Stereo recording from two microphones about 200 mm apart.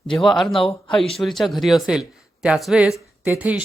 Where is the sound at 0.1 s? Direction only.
Centre (ahead or behind).